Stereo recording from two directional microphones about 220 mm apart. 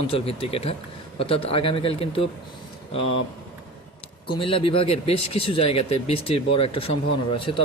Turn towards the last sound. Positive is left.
turn(degrees=25)  # may be behind; listen again after turning